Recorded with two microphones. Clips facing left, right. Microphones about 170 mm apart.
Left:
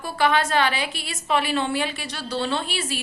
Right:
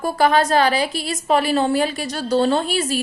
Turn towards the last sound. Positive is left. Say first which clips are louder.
# right 7 dB
turn(degrees=-40)  # may be behind; listen again after turning